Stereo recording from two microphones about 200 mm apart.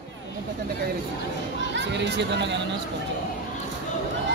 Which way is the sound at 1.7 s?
60° right (ahead or behind).